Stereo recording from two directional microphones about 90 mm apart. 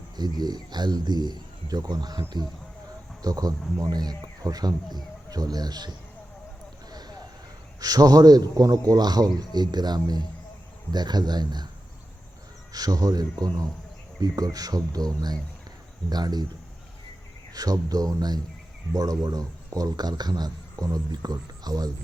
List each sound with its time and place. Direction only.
0.2 s a man's voice: 50° right (ahead or behind)
6.9 s a sound: 50° right (ahead or behind)
7.8 s a man's voice: 45° right (ahead or behind)
12.7 s a man's voice: 45° right (ahead or behind)
17.5 s a man's voice: 45° right (ahead or behind)